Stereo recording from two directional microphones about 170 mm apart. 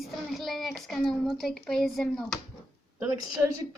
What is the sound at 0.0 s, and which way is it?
A child's voice, centre (ahead or behind).